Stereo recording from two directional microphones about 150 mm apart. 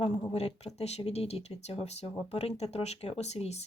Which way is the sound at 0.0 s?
40° left (ahead or behind).